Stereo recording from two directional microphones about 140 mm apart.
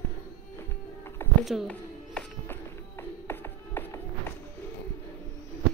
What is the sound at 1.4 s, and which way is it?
Music, centre (ahead or behind).